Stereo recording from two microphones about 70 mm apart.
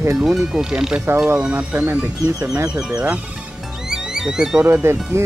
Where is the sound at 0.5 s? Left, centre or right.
Centre.